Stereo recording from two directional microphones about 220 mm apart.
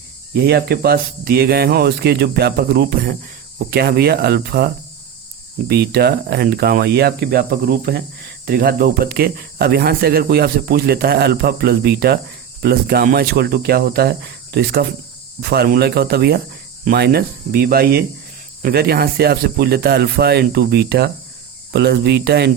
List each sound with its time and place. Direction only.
0.3 s speech: 45° right (ahead or behind)